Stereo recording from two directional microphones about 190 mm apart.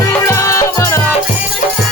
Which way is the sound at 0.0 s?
15° left (ahead or behind).